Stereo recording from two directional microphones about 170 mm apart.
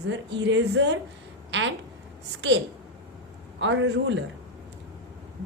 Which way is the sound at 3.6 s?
90° right.